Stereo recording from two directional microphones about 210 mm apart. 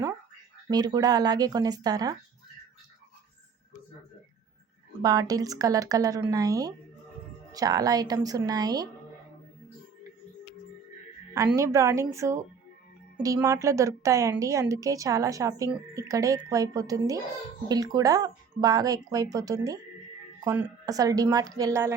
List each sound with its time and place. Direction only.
0.7 s speech: 20° right (ahead or behind)
5.0 s a woman's voice: 15° right (ahead or behind)
11.5 s a woman's voice: 15° right (ahead or behind)